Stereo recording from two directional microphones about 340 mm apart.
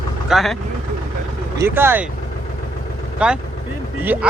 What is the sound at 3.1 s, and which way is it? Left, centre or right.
Speech, centre.